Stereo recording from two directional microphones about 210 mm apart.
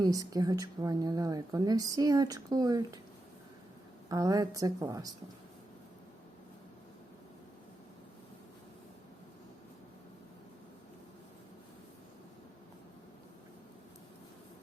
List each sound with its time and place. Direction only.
0.0 s speech: 15° right (ahead or behind)
4.1 s speech: 15° right (ahead or behind)